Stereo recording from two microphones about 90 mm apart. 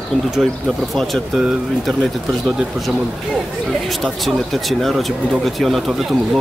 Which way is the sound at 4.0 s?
Centre (ahead or behind).